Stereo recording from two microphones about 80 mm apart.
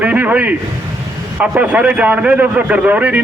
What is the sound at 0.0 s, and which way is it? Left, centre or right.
A man's voice, centre.